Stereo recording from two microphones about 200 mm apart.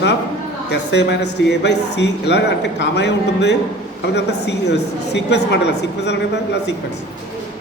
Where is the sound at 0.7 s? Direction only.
60° left (ahead or behind).